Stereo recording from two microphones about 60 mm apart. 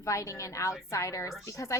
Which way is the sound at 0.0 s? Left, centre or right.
Left.